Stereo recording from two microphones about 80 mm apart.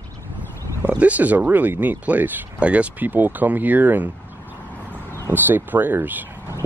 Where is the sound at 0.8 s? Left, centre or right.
Centre.